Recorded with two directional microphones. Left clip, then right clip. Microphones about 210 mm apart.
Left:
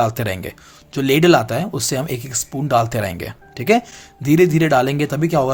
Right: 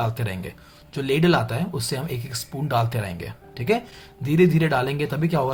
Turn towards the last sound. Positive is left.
turn(degrees=35)  # may be behind; listen again after turning